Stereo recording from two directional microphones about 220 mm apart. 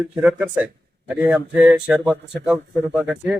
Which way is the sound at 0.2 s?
5° right (ahead or behind).